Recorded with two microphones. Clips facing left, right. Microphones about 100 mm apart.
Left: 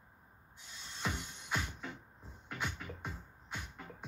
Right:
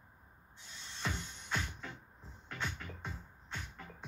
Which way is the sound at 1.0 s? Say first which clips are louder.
Left 1 dB; 10° left (ahead or behind).